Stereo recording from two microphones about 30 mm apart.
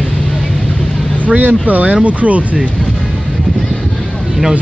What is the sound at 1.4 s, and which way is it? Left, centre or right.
Speech, right.